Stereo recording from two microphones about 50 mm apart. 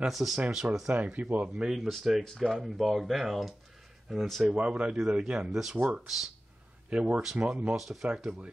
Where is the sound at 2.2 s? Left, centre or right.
Centre.